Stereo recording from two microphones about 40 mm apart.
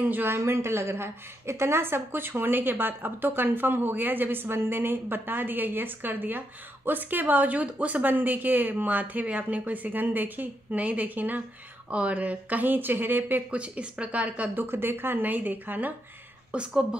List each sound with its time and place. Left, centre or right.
0.0 s a woman's voice: right
11.9 s speech: right
13.5 s speech: right
14.5 s a woman's voice: right
15.2 s speech: right
16.5 s a woman's voice: right